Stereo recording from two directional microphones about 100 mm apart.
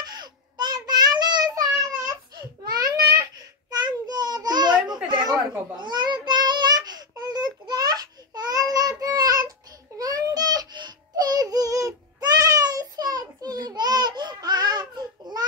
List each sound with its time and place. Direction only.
0.0 s child singing: 45° right (ahead or behind)
2.3 s a sound: 40° right (ahead or behind)
5.8 s child singing: 50° right (ahead or behind)